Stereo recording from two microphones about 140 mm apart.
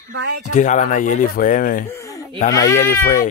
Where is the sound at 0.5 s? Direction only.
60° left (ahead or behind); by 1.8 s 75° left (ahead or behind).